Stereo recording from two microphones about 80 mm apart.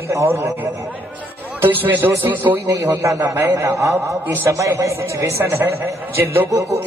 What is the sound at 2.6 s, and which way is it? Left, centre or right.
A man's voice, right.